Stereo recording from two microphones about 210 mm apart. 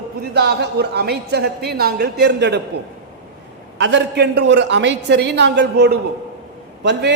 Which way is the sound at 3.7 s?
55° right (ahead or behind).